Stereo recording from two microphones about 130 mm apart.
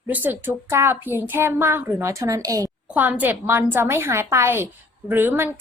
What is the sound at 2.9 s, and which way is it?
A woman's voice, 10° right (ahead or behind).